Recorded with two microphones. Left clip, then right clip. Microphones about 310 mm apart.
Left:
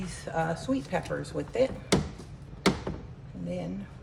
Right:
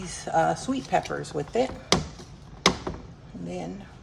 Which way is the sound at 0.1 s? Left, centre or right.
Right.